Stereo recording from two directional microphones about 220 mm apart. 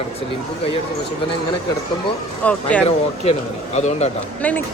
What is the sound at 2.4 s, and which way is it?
Speech, 5° left (ahead or behind).